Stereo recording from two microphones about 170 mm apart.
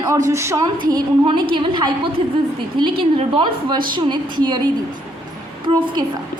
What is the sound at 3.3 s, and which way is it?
A woman's voice, 25° right (ahead or behind).